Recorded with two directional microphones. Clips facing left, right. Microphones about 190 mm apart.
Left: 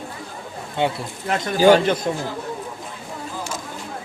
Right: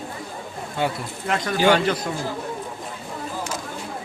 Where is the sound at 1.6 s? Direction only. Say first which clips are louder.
Left 5 dB; 40° left (ahead or behind).